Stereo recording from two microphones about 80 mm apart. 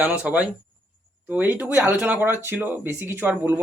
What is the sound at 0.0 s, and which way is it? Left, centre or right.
A man's voice, centre.